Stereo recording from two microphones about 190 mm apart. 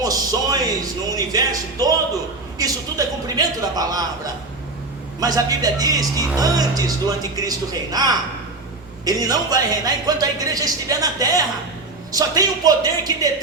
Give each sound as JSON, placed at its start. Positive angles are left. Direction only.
{"t": 0.0, "sound": "a man's voice", "side_deg": -20}
{"t": 5.2, "sound": "speech", "side_deg": -20}